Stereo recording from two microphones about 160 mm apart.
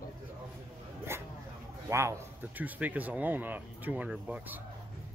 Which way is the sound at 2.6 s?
10° right (ahead or behind).